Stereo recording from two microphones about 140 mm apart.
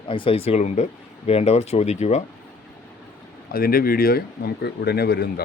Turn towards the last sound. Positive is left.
turn(degrees=90)